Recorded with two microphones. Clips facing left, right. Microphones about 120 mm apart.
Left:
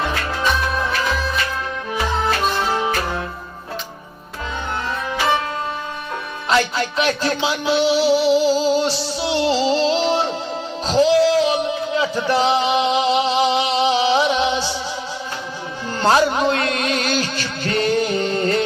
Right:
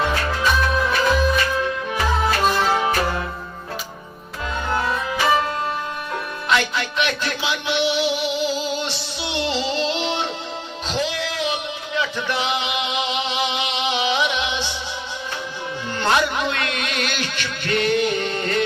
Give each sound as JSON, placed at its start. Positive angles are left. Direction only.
{"t": 6.5, "sound": "music", "side_deg": 35}
{"t": 16.0, "sound": "music", "side_deg": 40}